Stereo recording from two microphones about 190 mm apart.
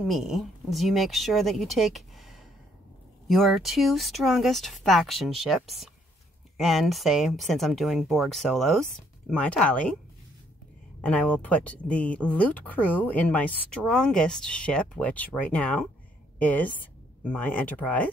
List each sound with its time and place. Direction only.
0.0 s speech: centre (ahead or behind)
11.0 s a woman's voice: 5° left (ahead or behind)